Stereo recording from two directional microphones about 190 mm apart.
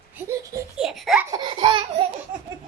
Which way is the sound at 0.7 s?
5° right (ahead or behind).